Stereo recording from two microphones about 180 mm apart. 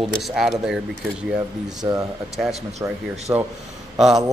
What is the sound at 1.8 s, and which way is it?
Speech, 15° right (ahead or behind).